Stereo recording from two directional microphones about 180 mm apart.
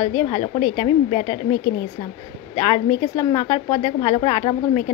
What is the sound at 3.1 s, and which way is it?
A woman's voice, 35° left (ahead or behind).